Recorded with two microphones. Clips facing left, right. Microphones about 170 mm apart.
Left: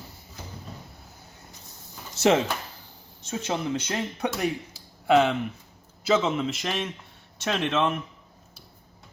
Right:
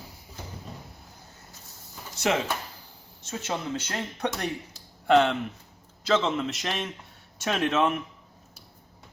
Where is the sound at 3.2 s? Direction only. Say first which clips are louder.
Left 3 dB; 15° left (ahead or behind); by 8.0 s 5° right (ahead or behind).